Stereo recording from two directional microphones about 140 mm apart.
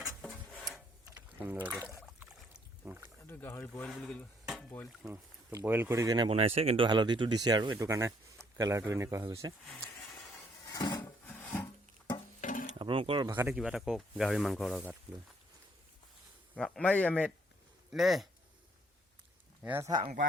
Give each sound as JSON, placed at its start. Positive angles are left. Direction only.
{"t": 0.0, "sound": "a sound", "side_deg": 0}
{"t": 1.4, "sound": "speech", "side_deg": -15}
{"t": 3.2, "sound": "a man's voice", "side_deg": 15}
{"t": 3.8, "sound": "stir", "side_deg": 0}
{"t": 5.0, "sound": "speech", "side_deg": -20}
{"t": 6.2, "sound": "speech", "side_deg": -45}
{"t": 10.7, "sound": "dishes", "side_deg": 25}
{"t": 11.0, "sound": "wood", "side_deg": 15}
{"t": 12.4, "sound": "stir", "side_deg": 65}
{"t": 12.8, "sound": "speech", "side_deg": -40}
{"t": 13.5, "sound": "speech", "side_deg": -5}
{"t": 16.6, "sound": "a man's voice", "side_deg": 5}
{"t": 19.6, "sound": "speech", "side_deg": -15}